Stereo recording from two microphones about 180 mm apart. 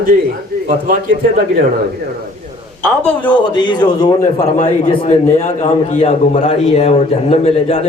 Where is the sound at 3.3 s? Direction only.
25° left (ahead or behind).